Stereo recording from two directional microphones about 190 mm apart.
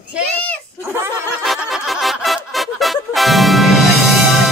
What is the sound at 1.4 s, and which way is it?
Music, centre (ahead or behind).